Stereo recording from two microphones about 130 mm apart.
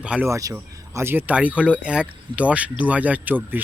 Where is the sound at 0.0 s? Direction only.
10° right (ahead or behind).